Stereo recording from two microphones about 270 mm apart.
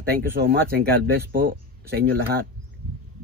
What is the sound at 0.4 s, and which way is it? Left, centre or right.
Speech, right.